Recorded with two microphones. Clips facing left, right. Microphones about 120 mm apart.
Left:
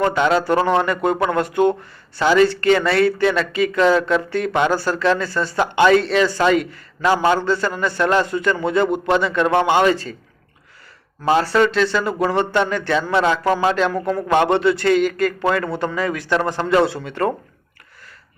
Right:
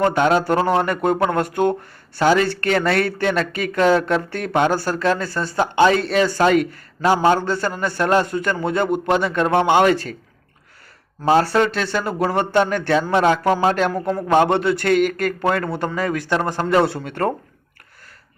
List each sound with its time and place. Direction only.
0.1 s speech: 50° right (ahead or behind); by 6.0 s 35° right (ahead or behind)
6.0 s speech: 45° right (ahead or behind); by 10.2 s 60° right (ahead or behind)
11.2 s speech: 45° right (ahead or behind)
15.4 s speech: 40° right (ahead or behind)